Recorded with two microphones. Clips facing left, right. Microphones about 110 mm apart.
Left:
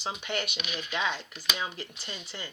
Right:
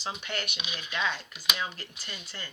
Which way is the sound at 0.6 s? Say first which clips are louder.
Left 3 dB; 15° right (ahead or behind).